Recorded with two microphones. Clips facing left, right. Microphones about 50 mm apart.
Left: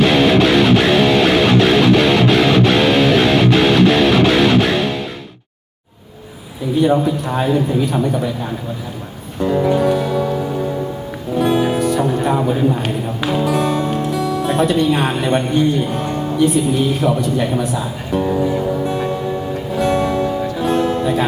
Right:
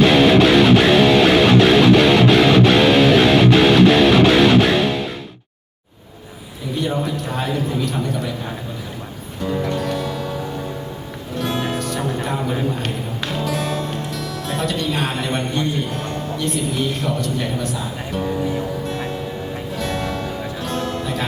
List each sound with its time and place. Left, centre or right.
0.0 s music: centre
6.8 s a man's voice: centre
9.4 s music: centre
12.6 s speech: centre
19.7 s music: centre
20.7 s music: centre